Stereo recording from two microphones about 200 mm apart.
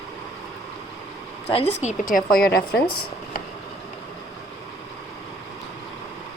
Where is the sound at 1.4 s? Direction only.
30° left (ahead or behind).